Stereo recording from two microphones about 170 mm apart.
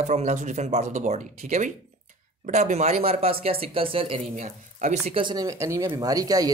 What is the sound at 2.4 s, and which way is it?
Speech, 45° right (ahead or behind).